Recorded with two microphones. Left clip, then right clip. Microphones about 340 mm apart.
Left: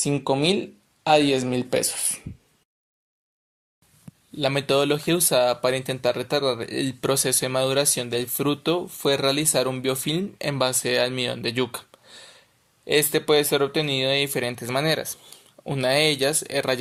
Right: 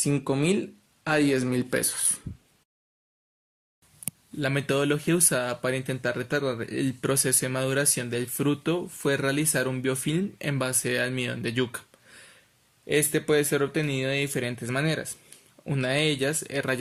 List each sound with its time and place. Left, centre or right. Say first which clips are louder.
1.2 s speech: left 2 dB; centre
4.4 s speech: left 5 dB; centre